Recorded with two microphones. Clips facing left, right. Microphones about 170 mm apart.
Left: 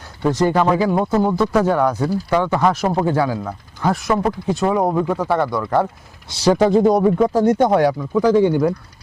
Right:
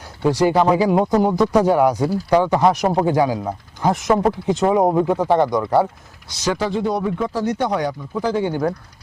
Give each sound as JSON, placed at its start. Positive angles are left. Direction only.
{"t": 0.2, "sound": "speech", "side_deg": -10}
{"t": 6.4, "sound": "speech", "side_deg": 45}